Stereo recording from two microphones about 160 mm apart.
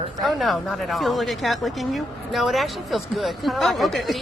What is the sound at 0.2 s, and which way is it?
A woman's voice, centre (ahead or behind).